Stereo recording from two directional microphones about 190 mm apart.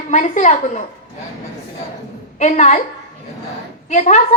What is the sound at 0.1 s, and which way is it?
Speech, 40° left (ahead or behind).